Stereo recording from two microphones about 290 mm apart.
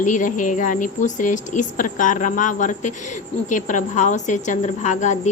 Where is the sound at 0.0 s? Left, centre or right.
Left.